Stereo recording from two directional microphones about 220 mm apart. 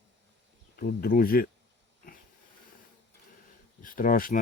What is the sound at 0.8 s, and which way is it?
Speech, 40° left (ahead or behind).